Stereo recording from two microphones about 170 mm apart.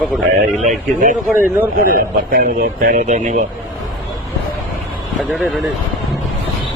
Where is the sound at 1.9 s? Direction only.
55° right (ahead or behind).